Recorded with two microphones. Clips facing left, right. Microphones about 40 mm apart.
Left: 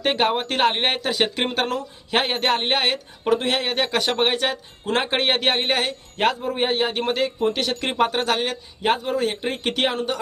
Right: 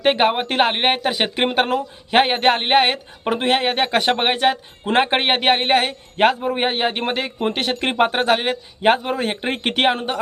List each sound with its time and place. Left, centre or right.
0.0 s speech: right
8.9 s speech: right